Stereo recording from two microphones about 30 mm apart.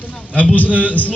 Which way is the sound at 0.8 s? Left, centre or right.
Left.